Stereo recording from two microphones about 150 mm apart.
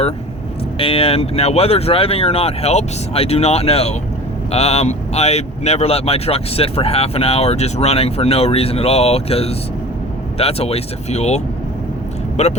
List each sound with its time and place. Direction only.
0.8 s speech: 40° left (ahead or behind)